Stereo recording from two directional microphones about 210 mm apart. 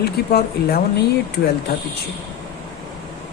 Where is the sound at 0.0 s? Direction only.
45° left (ahead or behind).